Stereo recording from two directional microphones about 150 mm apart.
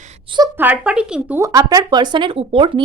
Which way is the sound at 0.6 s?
10° right (ahead or behind).